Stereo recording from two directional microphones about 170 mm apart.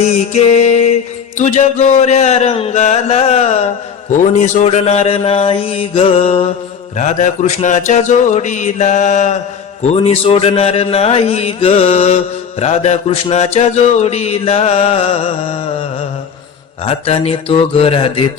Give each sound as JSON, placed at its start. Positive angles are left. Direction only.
{"t": 0.0, "sound": "music", "side_deg": 40}
{"t": 6.9, "sound": "mantra", "side_deg": 45}
{"t": 9.8, "sound": "music", "side_deg": 35}
{"t": 16.8, "sound": "music", "side_deg": 35}